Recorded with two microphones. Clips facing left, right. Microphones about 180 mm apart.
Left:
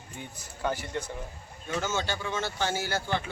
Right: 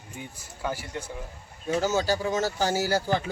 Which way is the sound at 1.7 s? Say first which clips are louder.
Right 6 dB; 35° right (ahead or behind).